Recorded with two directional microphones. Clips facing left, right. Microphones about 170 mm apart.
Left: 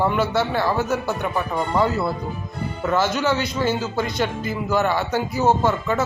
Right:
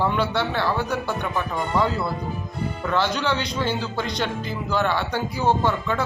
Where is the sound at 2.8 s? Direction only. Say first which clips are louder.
Left 3 dB; 5° left (ahead or behind).